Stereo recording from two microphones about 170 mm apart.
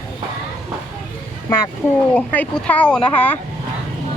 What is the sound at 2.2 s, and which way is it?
Speech, 10° left (ahead or behind).